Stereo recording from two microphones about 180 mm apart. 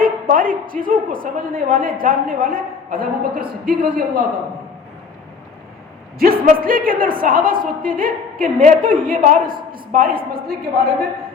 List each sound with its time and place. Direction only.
0.0 s a woman's voice: 50° right (ahead or behind)
6.1 s a woman's voice: 55° right (ahead or behind)